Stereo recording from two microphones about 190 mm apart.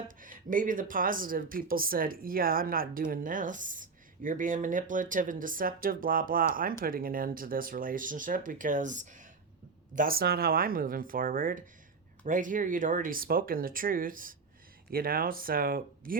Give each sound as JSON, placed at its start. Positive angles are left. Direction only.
{"t": 0.2, "sound": "speech", "side_deg": -45}